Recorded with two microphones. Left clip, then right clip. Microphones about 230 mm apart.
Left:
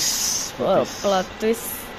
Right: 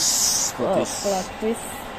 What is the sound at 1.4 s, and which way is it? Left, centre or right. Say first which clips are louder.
Speech: left 3 dB; left.